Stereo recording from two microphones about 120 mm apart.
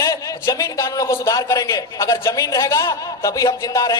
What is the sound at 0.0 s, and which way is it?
A man's voice, 30° left (ahead or behind).